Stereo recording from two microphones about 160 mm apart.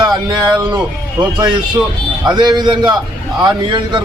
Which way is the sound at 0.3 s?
25° right (ahead or behind).